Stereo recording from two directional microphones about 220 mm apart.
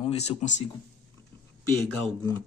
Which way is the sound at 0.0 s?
30° left (ahead or behind).